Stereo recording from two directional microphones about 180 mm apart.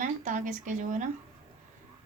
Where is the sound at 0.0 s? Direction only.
45° right (ahead or behind).